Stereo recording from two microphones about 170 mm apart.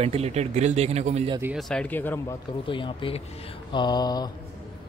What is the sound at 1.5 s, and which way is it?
Speech, 5° left (ahead or behind).